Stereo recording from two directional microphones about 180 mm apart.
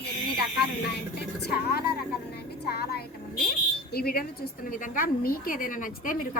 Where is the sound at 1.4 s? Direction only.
60° left (ahead or behind).